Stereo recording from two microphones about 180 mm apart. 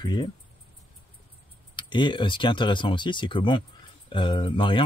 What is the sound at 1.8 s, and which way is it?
Speech, 25° left (ahead or behind).